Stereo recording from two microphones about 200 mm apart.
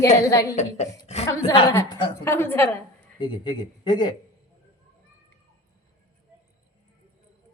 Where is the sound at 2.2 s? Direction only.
10° left (ahead or behind).